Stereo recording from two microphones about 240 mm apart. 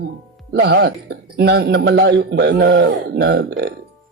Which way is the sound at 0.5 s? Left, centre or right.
Right.